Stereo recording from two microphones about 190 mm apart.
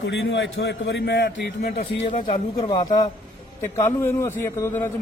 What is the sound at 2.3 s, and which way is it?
A man's voice, 20° left (ahead or behind).